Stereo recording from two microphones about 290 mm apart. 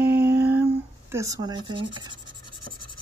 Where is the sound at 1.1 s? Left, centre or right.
Centre.